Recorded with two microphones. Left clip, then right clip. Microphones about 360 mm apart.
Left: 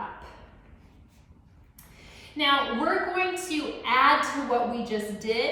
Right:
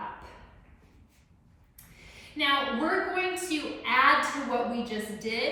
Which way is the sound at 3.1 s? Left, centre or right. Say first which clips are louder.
Left 2 dB; centre.